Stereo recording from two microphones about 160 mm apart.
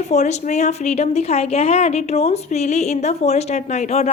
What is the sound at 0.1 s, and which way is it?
A woman's voice, 45° left (ahead or behind).